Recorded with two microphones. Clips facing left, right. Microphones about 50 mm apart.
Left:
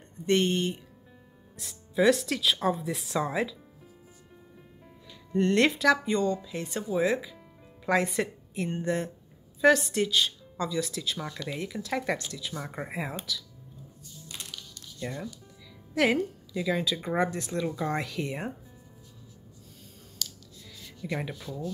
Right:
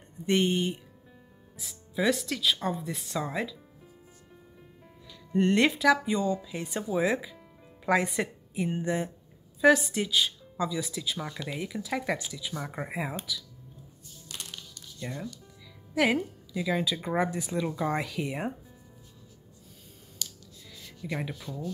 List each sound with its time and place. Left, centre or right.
0.3 s speech: centre
5.3 s a woman's voice: centre
5.6 s speech: centre
15.1 s a woman's voice: centre
20.8 s speech: centre